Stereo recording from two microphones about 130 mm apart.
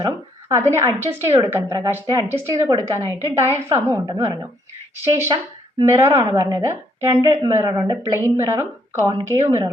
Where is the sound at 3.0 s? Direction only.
25° left (ahead or behind).